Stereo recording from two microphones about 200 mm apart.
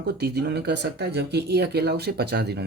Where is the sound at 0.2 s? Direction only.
55° right (ahead or behind).